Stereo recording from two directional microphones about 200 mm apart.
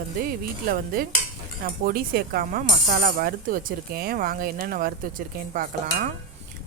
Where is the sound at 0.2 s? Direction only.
50° right (ahead or behind).